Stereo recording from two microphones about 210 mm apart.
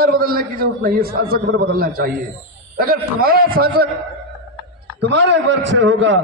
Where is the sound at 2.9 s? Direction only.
45° right (ahead or behind).